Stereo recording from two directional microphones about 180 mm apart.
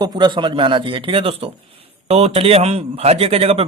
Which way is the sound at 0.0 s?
25° right (ahead or behind).